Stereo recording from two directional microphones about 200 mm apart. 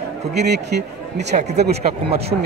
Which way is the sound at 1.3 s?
40° right (ahead or behind).